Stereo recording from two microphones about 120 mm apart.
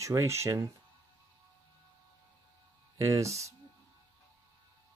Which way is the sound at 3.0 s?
25° right (ahead or behind).